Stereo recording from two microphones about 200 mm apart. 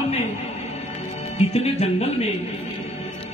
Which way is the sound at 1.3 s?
30° left (ahead or behind).